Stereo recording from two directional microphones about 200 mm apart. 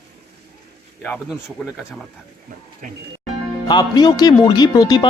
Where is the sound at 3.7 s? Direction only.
20° left (ahead or behind).